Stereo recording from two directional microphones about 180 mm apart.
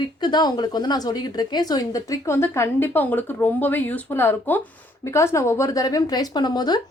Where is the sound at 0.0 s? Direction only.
25° left (ahead or behind).